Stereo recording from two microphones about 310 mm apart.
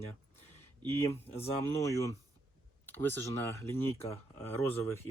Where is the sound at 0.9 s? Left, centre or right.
Centre.